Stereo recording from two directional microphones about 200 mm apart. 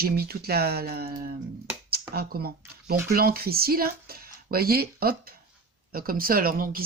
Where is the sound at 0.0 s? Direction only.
50° right (ahead or behind).